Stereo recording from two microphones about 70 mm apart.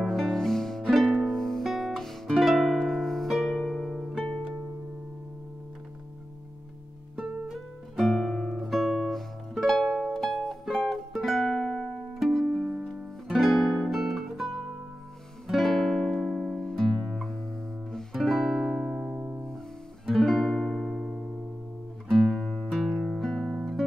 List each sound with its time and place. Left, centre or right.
0.0 s music: centre
3.3 s harp: centre
7.2 s music: centre
19.1 s music: right
20.1 s music: centre
22.4 s music: centre
22.8 s guitar: centre